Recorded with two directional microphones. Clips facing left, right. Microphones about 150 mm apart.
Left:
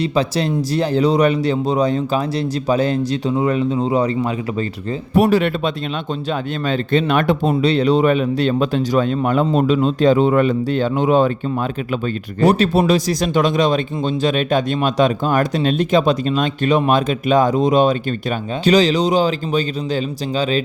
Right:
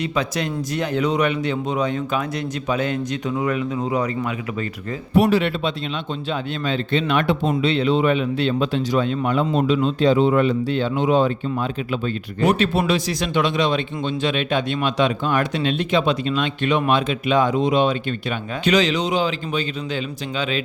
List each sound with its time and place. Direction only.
0.0 s a man's voice: 30° left (ahead or behind)
5.1 s speech: 45° left (ahead or behind)
12.4 s a man's voice: 40° left (ahead or behind)